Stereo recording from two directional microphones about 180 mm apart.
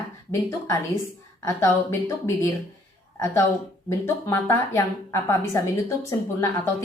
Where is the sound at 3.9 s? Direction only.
15° left (ahead or behind).